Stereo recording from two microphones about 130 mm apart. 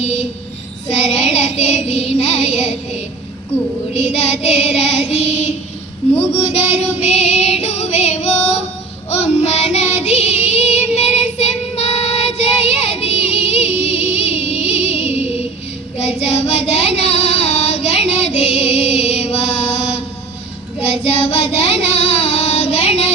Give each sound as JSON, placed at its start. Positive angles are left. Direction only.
{"t": 0.0, "sound": "child singing", "side_deg": 55}
{"t": 3.9, "sound": "child singing", "side_deg": 55}
{"t": 6.7, "sound": "female singing", "side_deg": 55}
{"t": 9.0, "sound": "child singing", "side_deg": 55}